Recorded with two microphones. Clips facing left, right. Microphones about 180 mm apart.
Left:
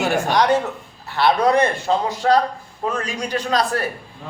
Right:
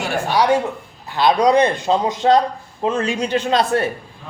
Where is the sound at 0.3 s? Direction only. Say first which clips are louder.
Right 4 dB; 10° right (ahead or behind); by 3.8 s 25° right (ahead or behind).